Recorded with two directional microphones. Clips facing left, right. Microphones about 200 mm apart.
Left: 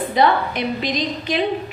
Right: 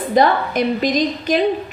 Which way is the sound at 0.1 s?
45° right (ahead or behind).